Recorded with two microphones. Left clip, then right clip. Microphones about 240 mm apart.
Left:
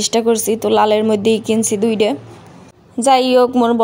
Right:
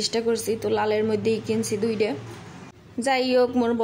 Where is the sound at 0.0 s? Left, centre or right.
Left.